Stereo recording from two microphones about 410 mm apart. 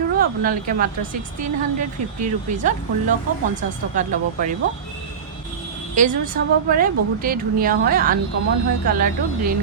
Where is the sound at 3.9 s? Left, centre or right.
Centre.